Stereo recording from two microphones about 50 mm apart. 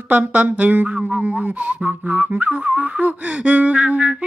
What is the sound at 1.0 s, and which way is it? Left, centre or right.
Music, right.